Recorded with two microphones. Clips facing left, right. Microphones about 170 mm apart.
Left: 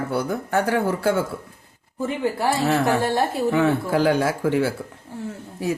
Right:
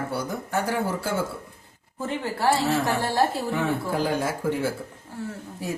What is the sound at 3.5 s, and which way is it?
Speech, 80° left.